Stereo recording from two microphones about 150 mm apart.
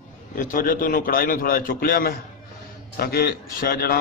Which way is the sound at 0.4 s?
65° left (ahead or behind).